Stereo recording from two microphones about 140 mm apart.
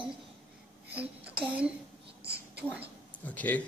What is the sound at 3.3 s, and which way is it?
Speech, 10° left (ahead or behind).